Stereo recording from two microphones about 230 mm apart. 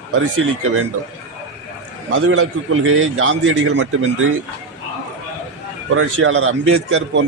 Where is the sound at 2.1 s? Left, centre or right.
Right.